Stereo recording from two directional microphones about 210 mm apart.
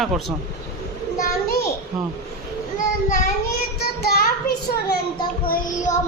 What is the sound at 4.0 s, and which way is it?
Child singing, 50° left (ahead or behind).